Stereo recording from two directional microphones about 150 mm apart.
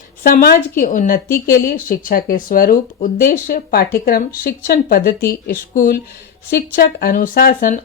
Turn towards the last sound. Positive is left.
turn(degrees=65)  # may be behind; listen again after turning